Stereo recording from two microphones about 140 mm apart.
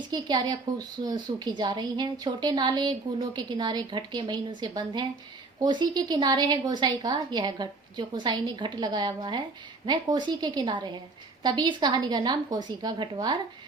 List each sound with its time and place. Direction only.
0.1 s a woman's voice: 30° right (ahead or behind)